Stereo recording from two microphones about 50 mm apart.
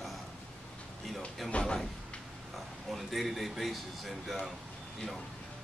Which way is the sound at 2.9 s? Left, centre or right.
Centre.